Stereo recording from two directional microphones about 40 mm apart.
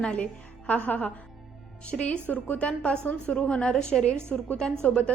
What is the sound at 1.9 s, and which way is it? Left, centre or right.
A woman's voice, left.